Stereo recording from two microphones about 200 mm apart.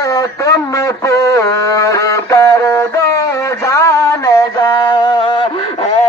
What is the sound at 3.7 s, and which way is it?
Mantra, 15° left (ahead or behind).